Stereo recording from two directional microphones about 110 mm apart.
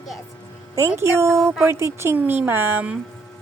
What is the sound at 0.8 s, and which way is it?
A woman's voice, 25° right (ahead or behind).